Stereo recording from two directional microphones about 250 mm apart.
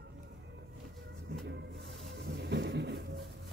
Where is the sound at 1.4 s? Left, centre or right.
Right.